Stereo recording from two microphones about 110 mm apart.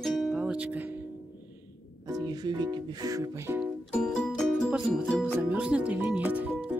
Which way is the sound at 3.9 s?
5° left (ahead or behind).